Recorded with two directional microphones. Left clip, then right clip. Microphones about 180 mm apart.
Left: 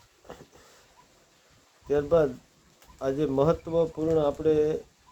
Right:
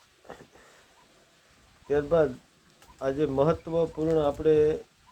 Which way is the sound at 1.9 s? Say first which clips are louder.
Left 1 dB; 20° left (ahead or behind).